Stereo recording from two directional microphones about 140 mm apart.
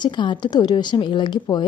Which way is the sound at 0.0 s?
35° left (ahead or behind).